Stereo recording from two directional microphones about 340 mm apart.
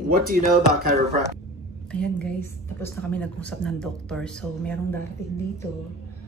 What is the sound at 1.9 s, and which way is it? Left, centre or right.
A woman's voice, centre.